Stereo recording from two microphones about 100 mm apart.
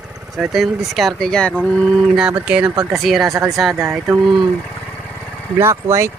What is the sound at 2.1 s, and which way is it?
Speech, 10° right (ahead or behind).